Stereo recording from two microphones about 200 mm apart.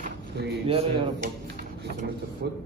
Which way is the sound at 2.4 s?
55° right (ahead or behind).